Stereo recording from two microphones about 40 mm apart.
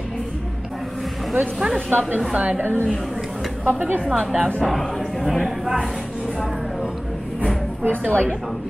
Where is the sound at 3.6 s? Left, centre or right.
Right.